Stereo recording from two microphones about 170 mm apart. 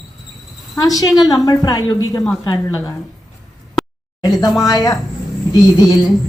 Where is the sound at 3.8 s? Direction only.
Centre (ahead or behind).